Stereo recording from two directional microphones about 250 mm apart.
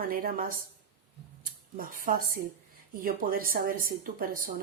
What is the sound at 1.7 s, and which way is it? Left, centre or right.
Speech, right.